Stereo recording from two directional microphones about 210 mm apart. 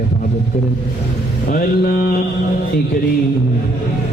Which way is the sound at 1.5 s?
45° left (ahead or behind).